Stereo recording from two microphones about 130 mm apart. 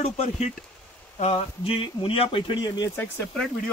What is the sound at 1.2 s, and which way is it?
Speech, 50° left (ahead or behind).